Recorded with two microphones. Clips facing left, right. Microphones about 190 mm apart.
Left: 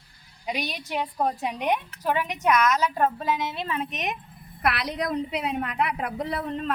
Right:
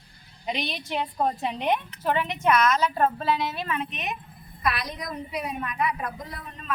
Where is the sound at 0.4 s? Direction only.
10° left (ahead or behind); by 3.8 s 25° left (ahead or behind).